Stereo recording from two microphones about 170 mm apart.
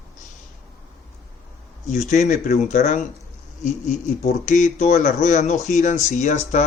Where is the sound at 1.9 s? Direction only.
45° left (ahead or behind).